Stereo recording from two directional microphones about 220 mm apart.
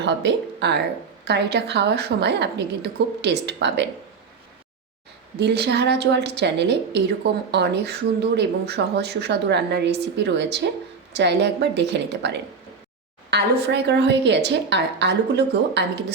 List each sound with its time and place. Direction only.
0.0 s a woman's voice: 50° right (ahead or behind)
5.4 s a woman's voice: 50° right (ahead or behind)